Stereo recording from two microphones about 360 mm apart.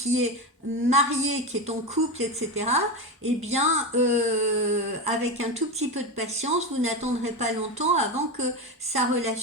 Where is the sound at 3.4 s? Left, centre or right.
Centre.